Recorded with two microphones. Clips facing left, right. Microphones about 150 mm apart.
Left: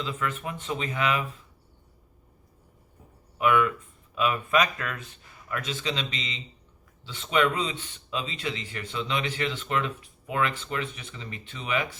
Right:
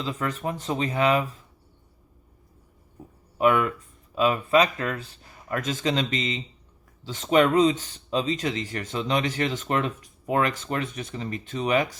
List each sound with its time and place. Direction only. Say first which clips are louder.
0.0 s speech: right 3 dB; 35° right (ahead or behind)
3.3 s speech: right 2 dB; 35° right (ahead or behind)